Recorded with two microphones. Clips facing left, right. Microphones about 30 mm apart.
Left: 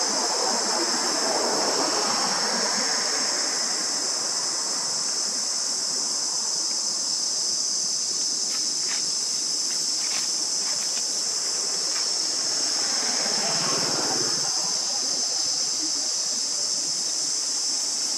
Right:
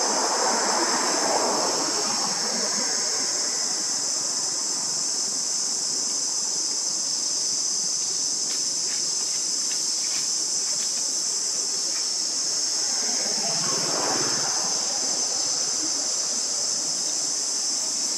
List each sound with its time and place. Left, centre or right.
0.4 s waves: right
1.2 s waves: centre
1.7 s waves: left